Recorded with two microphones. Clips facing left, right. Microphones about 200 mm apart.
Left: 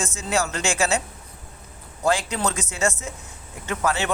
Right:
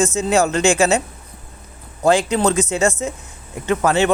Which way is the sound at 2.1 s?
25° right (ahead or behind).